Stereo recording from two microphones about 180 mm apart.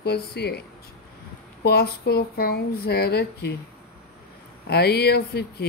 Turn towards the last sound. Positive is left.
turn(degrees=60)  # may be behind; listen again after turning